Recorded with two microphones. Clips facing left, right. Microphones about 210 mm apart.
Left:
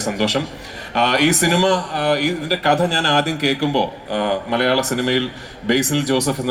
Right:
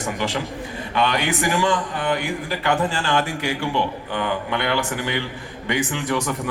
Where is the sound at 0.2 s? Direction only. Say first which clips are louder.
Left 7 dB; 75° left (ahead or behind).